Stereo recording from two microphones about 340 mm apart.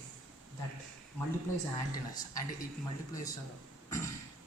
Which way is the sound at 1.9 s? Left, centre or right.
Centre.